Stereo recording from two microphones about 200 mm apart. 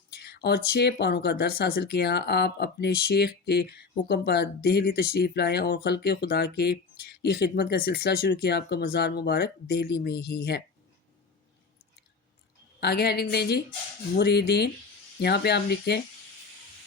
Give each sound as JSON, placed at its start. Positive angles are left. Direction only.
{"t": 0.1, "sound": "speech", "side_deg": 55}
{"t": 12.8, "sound": "a woman's voice", "side_deg": 55}